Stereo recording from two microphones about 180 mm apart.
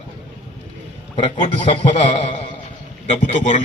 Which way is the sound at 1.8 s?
35° left (ahead or behind).